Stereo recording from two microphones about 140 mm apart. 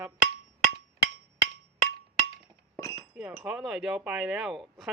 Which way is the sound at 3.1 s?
5° right (ahead or behind).